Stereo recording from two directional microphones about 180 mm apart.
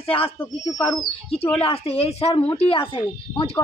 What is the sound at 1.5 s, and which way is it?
A woman's voice, 35° left (ahead or behind).